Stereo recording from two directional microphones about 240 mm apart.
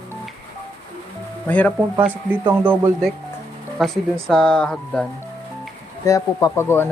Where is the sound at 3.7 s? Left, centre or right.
Centre.